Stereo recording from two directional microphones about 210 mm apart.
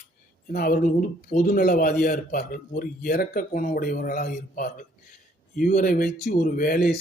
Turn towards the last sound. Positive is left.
turn(degrees=45)  # may be behind; listen again after turning